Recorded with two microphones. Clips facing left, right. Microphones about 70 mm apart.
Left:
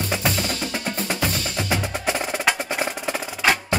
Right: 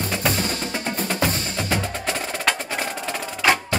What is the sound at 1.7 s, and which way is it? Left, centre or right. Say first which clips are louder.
Percussion: left 2 dB; centre.